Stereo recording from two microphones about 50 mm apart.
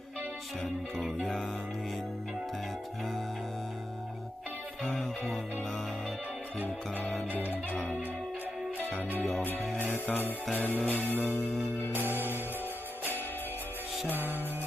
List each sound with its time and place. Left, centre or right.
6.7 s music: left
8.9 s music: left
11.9 s music: right
14.1 s music: right